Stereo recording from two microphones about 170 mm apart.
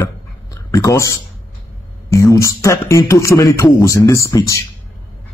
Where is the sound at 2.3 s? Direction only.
20° left (ahead or behind).